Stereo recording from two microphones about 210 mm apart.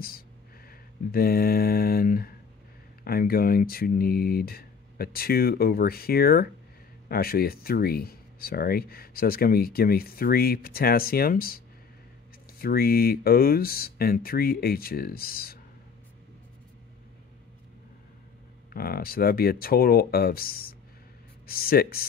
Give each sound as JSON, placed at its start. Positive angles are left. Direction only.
{"t": 0.7, "sound": "mantra", "side_deg": 45}
{"t": 3.0, "sound": "speech", "side_deg": 45}
{"t": 18.7, "sound": "speech", "side_deg": 45}